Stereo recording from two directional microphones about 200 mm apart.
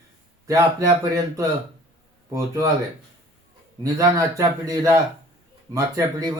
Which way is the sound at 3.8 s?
15° right (ahead or behind).